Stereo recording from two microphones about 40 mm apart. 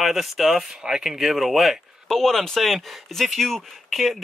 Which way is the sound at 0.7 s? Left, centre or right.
Right.